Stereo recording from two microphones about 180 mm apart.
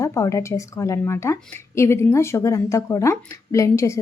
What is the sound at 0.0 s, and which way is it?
A woman's voice, 15° left (ahead or behind).